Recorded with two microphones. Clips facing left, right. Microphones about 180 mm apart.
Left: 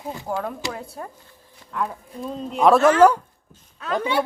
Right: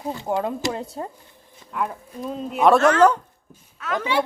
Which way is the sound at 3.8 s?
30° left (ahead or behind).